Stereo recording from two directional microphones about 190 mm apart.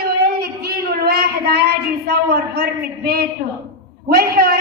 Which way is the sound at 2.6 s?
55° right (ahead or behind).